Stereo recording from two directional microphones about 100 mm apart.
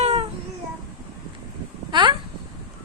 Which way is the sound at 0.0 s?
90° right.